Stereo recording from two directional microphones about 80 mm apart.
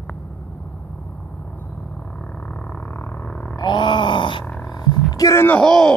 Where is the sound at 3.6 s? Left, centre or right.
Left.